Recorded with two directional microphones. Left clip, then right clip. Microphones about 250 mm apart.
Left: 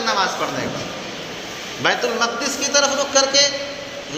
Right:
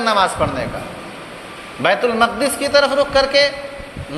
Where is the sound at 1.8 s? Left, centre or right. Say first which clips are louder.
Right 4 dB; right.